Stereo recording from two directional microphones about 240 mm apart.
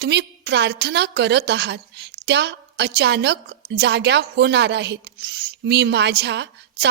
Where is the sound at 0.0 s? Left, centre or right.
Right.